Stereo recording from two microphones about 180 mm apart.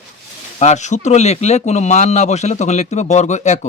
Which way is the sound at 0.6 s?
40° left (ahead or behind).